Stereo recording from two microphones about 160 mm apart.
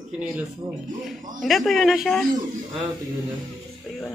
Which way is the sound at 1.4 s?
Centre (ahead or behind).